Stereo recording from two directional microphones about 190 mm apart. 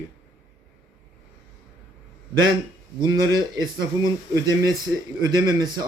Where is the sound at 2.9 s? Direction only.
20° right (ahead or behind).